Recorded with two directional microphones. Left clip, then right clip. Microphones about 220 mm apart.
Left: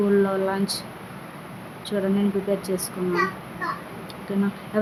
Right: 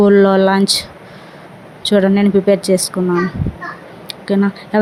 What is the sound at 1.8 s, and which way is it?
A woman's voice, 35° right (ahead or behind).